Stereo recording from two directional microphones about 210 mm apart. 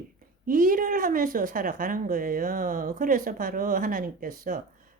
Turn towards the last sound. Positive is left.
turn(degrees=-40)  # may be behind; listen again after turning